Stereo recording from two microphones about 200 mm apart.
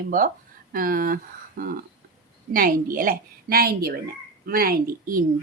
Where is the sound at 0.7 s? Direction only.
45° right (ahead or behind).